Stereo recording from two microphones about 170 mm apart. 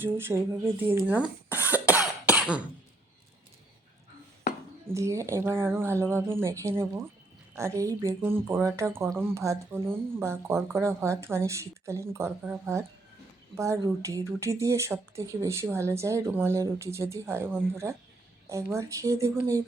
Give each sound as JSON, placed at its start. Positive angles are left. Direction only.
{"t": 0.0, "sound": "speech", "side_deg": -15}
{"t": 1.6, "sound": "cough", "side_deg": -10}
{"t": 4.9, "sound": "speech", "side_deg": -15}